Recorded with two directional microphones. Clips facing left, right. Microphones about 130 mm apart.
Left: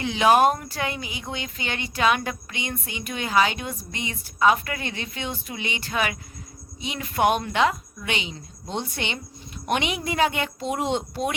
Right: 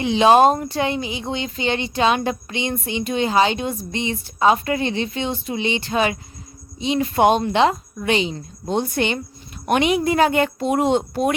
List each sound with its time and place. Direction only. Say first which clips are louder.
0.0 s speech: right 5 dB; 25° right (ahead or behind); by 11.3 s 50° right (ahead or behind)